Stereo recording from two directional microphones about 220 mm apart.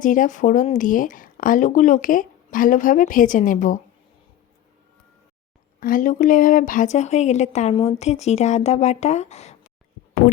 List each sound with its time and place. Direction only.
0.0 s speech: 35° left (ahead or behind)
5.8 s speech: 40° left (ahead or behind)